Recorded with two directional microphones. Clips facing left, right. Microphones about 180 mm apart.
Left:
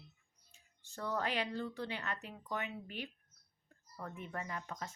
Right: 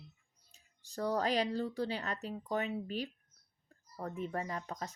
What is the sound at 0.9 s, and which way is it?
Speech, 40° right (ahead or behind).